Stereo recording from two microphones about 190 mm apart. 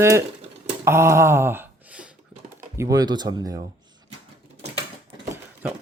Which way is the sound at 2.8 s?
20° right (ahead or behind).